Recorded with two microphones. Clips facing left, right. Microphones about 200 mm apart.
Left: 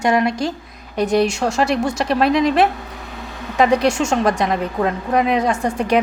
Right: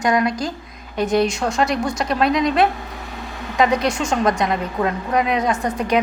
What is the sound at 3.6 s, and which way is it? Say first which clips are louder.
A woman's voice: left 3 dB; 30° left (ahead or behind).